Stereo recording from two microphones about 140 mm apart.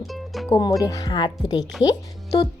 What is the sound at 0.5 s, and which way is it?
A woman's voice, 25° left (ahead or behind).